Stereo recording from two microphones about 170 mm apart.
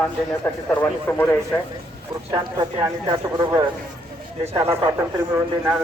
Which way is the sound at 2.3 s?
25° right (ahead or behind).